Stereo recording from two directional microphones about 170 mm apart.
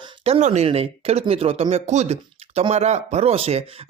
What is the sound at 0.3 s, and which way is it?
Speech, 40° right (ahead or behind).